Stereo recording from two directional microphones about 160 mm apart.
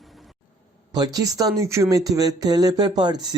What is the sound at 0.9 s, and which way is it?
Speech, 25° right (ahead or behind).